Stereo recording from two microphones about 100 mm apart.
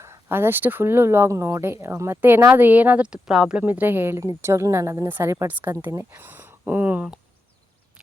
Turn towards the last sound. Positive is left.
turn(degrees=-15)  # may be behind; listen again after turning